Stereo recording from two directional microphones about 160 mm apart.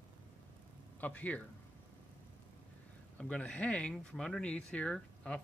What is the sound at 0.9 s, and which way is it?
Speech, 10° left (ahead or behind).